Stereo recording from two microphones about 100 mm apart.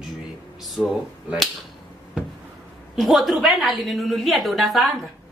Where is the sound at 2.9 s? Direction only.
Centre (ahead or behind).